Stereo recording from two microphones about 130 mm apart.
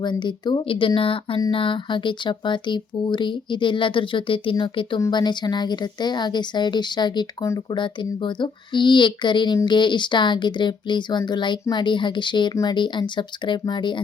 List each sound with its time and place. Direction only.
0.0 s speech: 35° left (ahead or behind)